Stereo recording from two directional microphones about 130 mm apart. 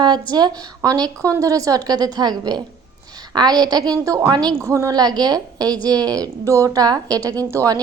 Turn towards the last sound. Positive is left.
turn(degrees=-25)  # may be behind; listen again after turning